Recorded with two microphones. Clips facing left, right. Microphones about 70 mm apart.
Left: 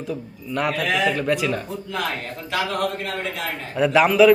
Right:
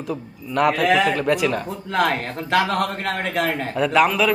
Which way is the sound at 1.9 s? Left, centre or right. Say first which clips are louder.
Right 8 dB; right.